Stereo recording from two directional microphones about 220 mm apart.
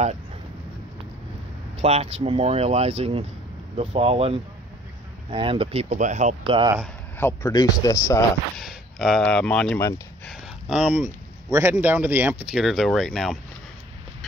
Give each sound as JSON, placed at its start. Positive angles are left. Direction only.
{"t": 1.8, "sound": "speech", "side_deg": -30}
{"t": 7.2, "sound": "a man's voice", "side_deg": 10}
{"t": 8.5, "sound": "speech", "side_deg": 0}
{"t": 10.7, "sound": "speech", "side_deg": -5}